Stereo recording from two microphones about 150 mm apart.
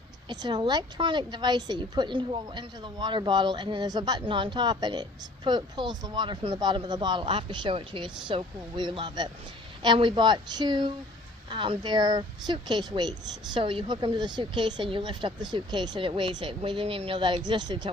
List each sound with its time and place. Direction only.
0.3 s a woman's voice: 30° right (ahead or behind)